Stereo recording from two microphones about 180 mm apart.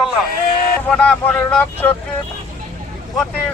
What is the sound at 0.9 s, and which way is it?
Speech, 5° left (ahead or behind).